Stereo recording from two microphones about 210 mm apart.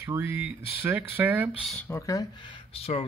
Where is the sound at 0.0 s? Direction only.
10° right (ahead or behind).